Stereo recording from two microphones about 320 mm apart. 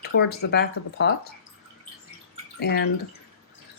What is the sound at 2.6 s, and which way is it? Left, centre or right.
Speech, left.